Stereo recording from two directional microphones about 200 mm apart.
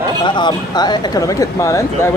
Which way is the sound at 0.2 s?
25° left (ahead or behind).